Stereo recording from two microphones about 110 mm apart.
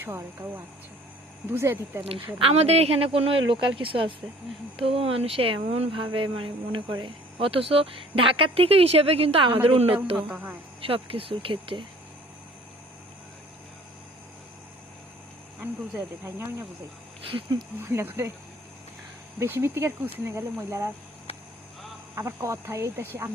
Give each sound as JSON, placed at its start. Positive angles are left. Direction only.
{"t": 0.0, "sound": "speech", "side_deg": -20}
{"t": 2.4, "sound": "speech", "side_deg": -70}
{"t": 10.2, "sound": "speech", "side_deg": -15}
{"t": 10.8, "sound": "speech", "side_deg": -55}
{"t": 15.6, "sound": "speech", "side_deg": -20}
{"t": 17.7, "sound": "speech", "side_deg": -20}
{"t": 19.4, "sound": "speech", "side_deg": -25}
{"t": 21.3, "sound": "vehicle", "side_deg": 60}
{"t": 22.1, "sound": "speech", "side_deg": -25}